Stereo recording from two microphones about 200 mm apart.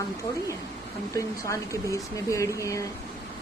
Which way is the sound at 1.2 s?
15° left (ahead or behind).